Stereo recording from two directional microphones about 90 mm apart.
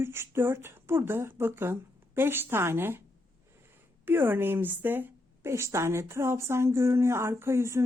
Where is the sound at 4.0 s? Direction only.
25° right (ahead or behind).